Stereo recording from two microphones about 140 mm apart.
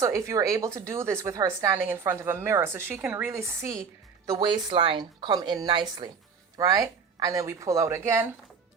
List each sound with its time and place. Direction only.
0.0 s a woman's voice: 20° right (ahead or behind)
4.3 s a woman's voice: 30° right (ahead or behind)